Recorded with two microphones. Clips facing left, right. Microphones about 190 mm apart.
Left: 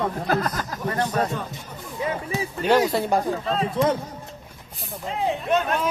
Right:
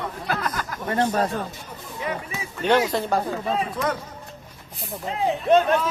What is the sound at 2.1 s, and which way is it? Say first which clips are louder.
Speech: left 3 dB; 35° left (ahead or behind).